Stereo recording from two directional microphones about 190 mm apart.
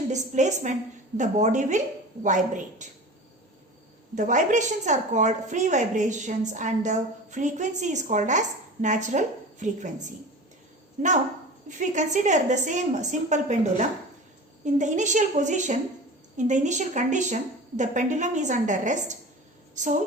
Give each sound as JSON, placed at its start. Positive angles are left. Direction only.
{"t": 0.1, "sound": "a woman's voice", "side_deg": -40}
{"t": 4.1, "sound": "a woman's voice", "side_deg": -40}